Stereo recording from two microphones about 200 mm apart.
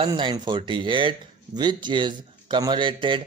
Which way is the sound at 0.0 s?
25° right (ahead or behind).